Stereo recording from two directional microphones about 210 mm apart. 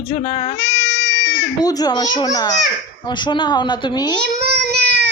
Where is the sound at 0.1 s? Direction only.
20° left (ahead or behind).